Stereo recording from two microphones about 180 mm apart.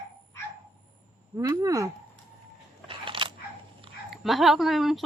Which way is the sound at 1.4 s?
20° right (ahead or behind).